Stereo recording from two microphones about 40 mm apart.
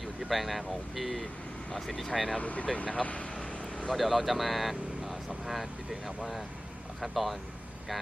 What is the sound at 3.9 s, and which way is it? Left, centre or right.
Speech, centre.